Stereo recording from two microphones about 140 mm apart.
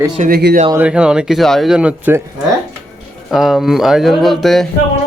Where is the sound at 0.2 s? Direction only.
80° right.